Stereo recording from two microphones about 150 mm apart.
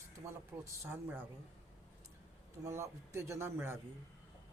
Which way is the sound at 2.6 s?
20° right (ahead or behind).